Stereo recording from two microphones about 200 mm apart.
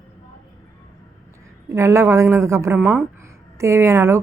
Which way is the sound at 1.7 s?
15° right (ahead or behind).